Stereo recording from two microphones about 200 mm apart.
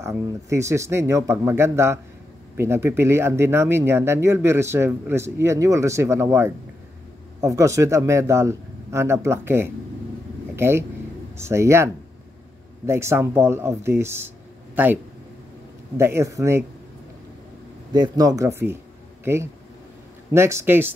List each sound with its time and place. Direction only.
0.0 s speech: 15° right (ahead or behind)
10.5 s vehicle: 10° right (ahead or behind)
11.3 s speech: 15° right (ahead or behind)
16.0 s speech: 15° right (ahead or behind)
17.9 s speech: 20° right (ahead or behind)